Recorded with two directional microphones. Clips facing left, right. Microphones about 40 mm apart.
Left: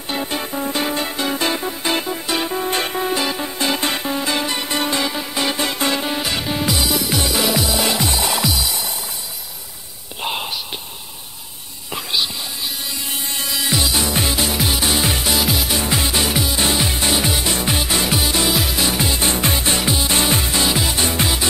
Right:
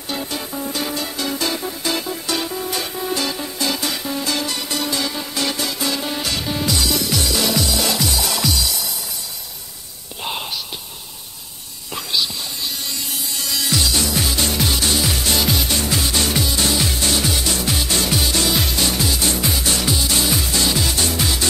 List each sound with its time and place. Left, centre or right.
0.1 s music: left
3.1 s music: left
10.2 s gasp: centre
11.9 s music: centre
14.4 s music: centre
15.2 s music: centre
15.8 s music: left
18.9 s music: left
20.2 s music: left